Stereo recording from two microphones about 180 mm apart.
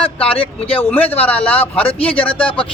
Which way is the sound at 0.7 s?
10° left (ahead or behind).